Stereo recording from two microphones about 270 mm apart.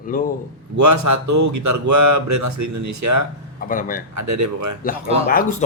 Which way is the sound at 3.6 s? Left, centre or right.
Left.